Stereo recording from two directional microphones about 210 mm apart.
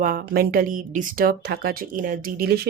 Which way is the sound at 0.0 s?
40° right (ahead or behind).